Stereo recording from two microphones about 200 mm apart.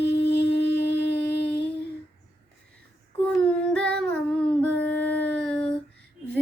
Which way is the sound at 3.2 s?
5° left (ahead or behind).